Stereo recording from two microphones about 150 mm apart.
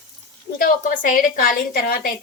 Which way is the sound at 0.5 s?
65° left (ahead or behind).